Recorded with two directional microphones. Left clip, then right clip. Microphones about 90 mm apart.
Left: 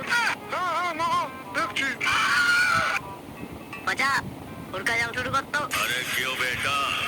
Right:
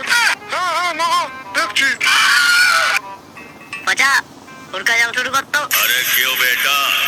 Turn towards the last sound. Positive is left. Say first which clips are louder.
# right 10 dB
turn(degrees=-15)  # may be behind; listen again after turning